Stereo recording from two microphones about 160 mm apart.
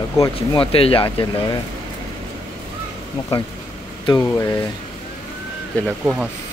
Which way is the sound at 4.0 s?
25° left (ahead or behind).